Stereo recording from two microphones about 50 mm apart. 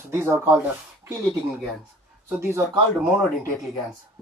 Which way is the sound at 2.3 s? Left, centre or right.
Right.